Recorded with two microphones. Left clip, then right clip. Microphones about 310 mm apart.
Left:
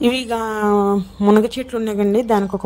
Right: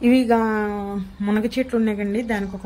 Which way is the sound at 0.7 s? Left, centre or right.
Left.